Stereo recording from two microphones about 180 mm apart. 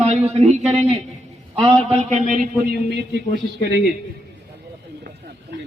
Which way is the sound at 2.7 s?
65° right (ahead or behind).